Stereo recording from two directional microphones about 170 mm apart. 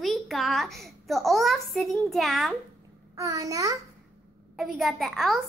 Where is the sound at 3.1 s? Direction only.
20° right (ahead or behind).